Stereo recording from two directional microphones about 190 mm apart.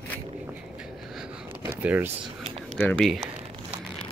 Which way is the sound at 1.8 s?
10° right (ahead or behind).